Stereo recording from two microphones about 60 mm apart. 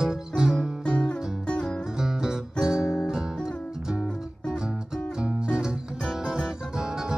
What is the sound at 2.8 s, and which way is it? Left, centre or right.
Music, left.